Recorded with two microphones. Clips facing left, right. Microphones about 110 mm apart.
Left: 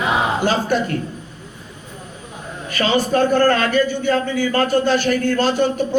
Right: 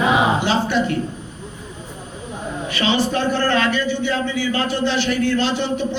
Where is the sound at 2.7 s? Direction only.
45° left (ahead or behind).